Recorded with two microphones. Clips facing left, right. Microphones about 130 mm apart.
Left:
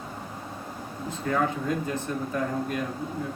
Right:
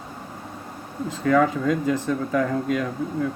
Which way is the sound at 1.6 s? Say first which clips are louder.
Right 7 dB; 90° right.